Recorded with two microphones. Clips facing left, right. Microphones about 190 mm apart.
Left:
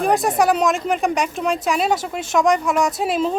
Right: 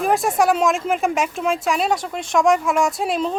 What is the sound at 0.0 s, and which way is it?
Speech, centre (ahead or behind).